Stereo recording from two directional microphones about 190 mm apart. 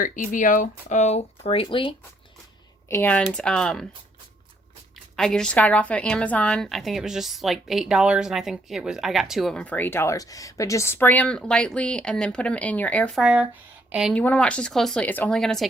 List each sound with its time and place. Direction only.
0.0 s speech: 45° left (ahead or behind); by 2.0 s 25° left (ahead or behind)
2.9 s a woman's voice: 10° left (ahead or behind)
5.1 s a woman's voice: 5° left (ahead or behind)
13.2 s speech: 10° right (ahead or behind)
14.2 s a woman's voice: 5° left (ahead or behind)